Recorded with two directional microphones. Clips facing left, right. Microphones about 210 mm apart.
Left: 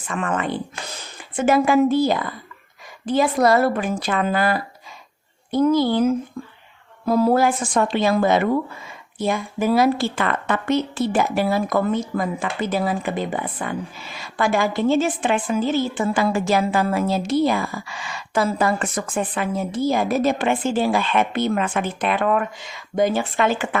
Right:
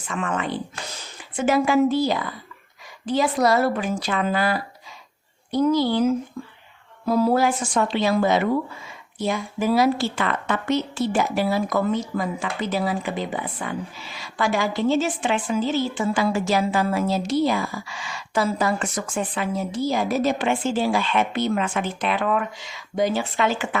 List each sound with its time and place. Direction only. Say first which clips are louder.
0.1 s speech: left 2 dB; 55° left (ahead or behind)